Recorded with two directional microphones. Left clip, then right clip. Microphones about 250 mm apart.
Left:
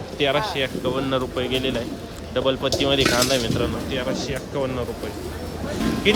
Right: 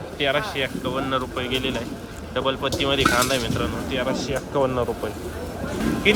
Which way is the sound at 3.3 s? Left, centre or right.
Centre.